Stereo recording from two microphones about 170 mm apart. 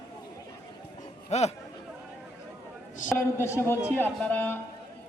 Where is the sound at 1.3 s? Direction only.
40° left (ahead or behind).